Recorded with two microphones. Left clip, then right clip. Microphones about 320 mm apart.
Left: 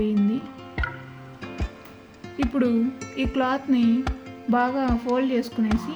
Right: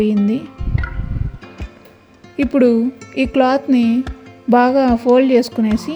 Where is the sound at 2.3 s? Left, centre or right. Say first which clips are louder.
Right 10 dB; right.